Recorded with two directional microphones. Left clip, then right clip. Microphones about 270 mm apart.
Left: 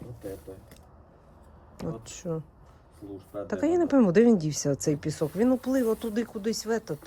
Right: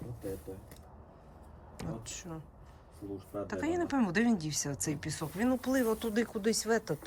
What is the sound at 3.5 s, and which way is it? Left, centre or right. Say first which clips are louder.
Speech: left 9 dB; left.